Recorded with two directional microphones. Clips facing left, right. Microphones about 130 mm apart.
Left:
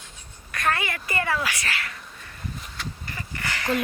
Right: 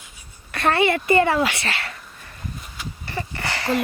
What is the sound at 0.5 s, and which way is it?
Speech, 30° right (ahead or behind).